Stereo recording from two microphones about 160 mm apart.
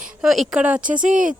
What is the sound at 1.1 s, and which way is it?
Speech, 55° right (ahead or behind).